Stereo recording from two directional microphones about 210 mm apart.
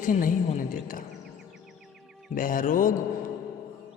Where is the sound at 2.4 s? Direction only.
40° left (ahead or behind).